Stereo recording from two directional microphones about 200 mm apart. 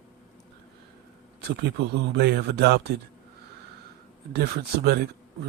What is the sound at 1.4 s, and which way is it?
A man's voice, 50° right (ahead or behind).